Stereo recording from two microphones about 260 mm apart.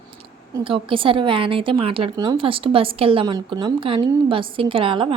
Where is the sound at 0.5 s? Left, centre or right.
Centre.